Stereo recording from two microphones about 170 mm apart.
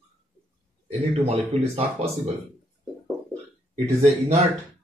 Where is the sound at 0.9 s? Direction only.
35° right (ahead or behind).